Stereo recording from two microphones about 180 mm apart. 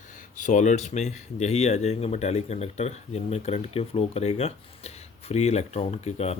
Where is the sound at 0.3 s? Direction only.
45° left (ahead or behind).